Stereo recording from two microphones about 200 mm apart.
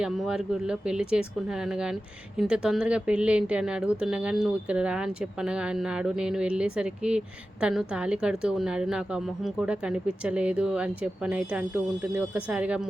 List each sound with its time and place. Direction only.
0.0 s a woman's voice: 5° right (ahead or behind)